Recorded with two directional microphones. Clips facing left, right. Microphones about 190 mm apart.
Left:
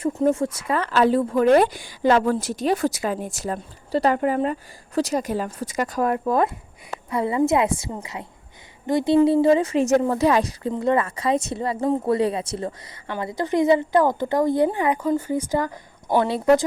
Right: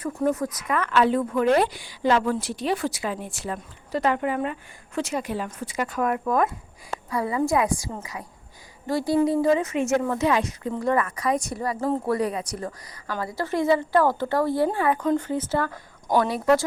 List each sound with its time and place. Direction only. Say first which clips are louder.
0.0 s a woman's voice: left 4 dB; 25° left (ahead or behind)
10.7 s a woman's voice: left 2 dB; 25° left (ahead or behind)